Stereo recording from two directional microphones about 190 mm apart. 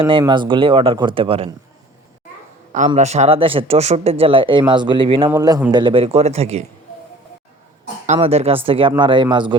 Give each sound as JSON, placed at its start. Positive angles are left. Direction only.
{"t": 0.1, "sound": "speech", "side_deg": -25}
{"t": 2.7, "sound": "speech", "side_deg": -40}
{"t": 5.3, "sound": "a man's voice", "side_deg": -15}
{"t": 5.7, "sound": "speech", "side_deg": -25}
{"t": 8.0, "sound": "speech", "side_deg": -35}